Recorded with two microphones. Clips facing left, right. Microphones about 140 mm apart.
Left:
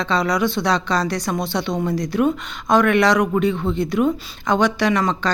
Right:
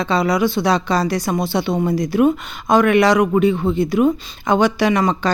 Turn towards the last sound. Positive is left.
turn(degrees=-10)  # may be behind; listen again after turning